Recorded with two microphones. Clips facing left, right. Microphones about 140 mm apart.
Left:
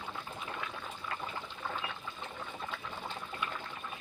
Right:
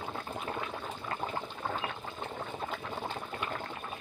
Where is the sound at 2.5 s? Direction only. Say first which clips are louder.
Right 4 dB; 45° right (ahead or behind).